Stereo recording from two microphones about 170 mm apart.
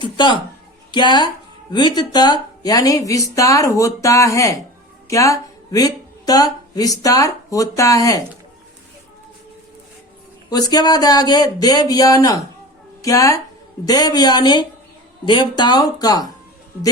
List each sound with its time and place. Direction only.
0.0 s a woman's voice: 25° left (ahead or behind)
10.5 s speech: 20° left (ahead or behind)